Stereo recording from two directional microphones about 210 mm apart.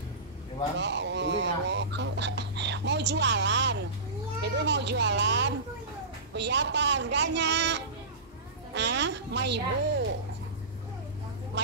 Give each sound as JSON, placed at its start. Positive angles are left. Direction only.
{"t": 0.7, "sound": "fowl", "side_deg": -55}
{"t": 4.4, "sound": "a woman's voice", "side_deg": -55}
{"t": 11.6, "sound": "a woman's voice", "side_deg": -55}